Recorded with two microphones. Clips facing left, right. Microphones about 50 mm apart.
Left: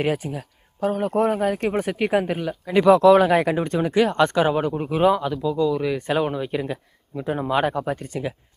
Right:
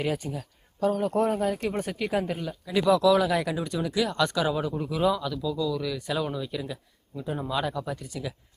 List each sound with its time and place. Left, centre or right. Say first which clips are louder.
0.2 s speech: left 4 dB; left
0.8 s speech: left 3 dB; left
1.5 s speech: left 6 dB; left
2.3 s speech: left 6 dB; left
2.6 s speech: left 7 dB; left